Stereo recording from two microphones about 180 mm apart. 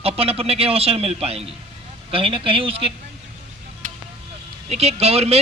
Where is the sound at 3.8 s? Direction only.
45° right (ahead or behind).